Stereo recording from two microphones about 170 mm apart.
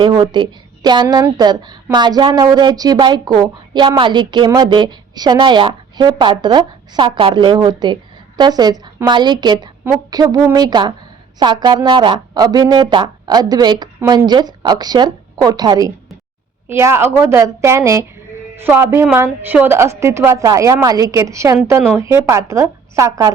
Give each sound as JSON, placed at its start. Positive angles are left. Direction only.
{"t": 0.0, "sound": "a woman's voice", "side_deg": -25}